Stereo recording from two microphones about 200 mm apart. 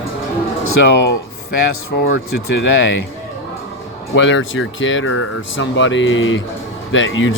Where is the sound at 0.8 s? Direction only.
65° left (ahead or behind).